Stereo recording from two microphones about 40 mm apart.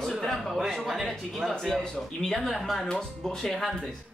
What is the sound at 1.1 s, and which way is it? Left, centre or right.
Speech, centre.